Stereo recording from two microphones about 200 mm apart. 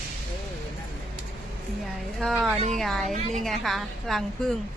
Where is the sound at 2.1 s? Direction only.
Centre (ahead or behind).